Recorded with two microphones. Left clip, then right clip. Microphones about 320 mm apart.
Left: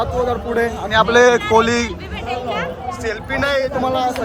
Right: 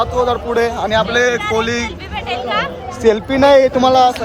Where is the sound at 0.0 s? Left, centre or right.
Centre.